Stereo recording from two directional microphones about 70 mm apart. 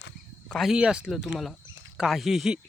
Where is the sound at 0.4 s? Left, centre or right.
Centre.